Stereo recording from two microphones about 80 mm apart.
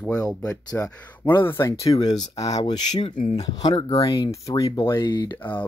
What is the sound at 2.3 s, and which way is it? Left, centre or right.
Speech, left.